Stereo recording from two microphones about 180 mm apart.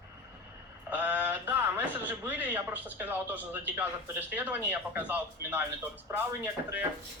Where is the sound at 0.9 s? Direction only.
10° right (ahead or behind).